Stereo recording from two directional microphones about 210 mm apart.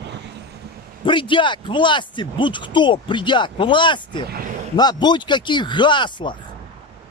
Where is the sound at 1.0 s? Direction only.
25° left (ahead or behind).